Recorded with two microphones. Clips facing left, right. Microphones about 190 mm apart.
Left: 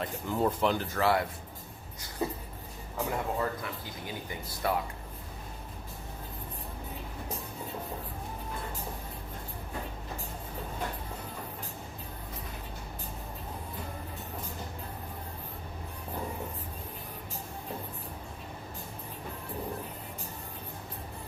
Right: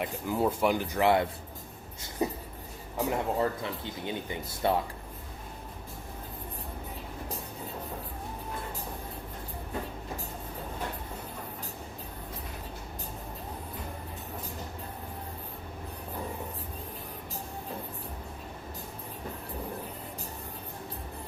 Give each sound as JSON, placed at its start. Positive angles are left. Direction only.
{"t": 0.0, "sound": "speech", "side_deg": -10}
{"t": 2.0, "sound": "a sound", "side_deg": -20}
{"t": 3.1, "sound": "speech", "side_deg": -25}